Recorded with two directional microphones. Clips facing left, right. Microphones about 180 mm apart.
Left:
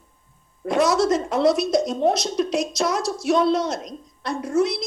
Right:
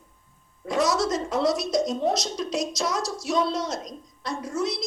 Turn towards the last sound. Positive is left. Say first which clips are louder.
# left 6 dB
turn(degrees=60)  # may be behind; listen again after turning